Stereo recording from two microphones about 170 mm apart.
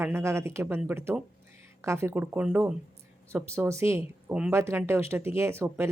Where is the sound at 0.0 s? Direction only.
15° right (ahead or behind).